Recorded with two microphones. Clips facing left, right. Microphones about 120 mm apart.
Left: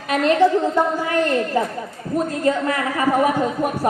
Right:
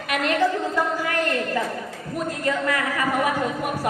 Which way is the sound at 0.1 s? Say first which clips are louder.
Left 6 dB; 30° left (ahead or behind).